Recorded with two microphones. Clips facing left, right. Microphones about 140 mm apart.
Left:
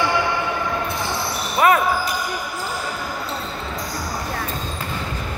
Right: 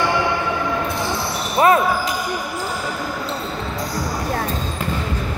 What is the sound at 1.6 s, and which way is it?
Basketball bounce, 30° right (ahead or behind).